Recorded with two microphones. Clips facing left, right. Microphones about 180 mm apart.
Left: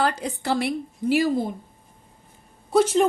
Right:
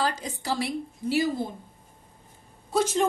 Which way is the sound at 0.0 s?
60° left (ahead or behind).